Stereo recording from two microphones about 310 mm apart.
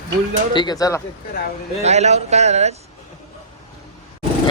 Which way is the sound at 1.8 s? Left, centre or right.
Right.